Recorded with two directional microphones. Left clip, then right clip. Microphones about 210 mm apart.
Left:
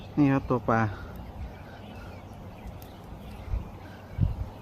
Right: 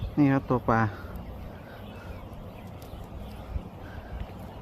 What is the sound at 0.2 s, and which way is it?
Speech, centre (ahead or behind).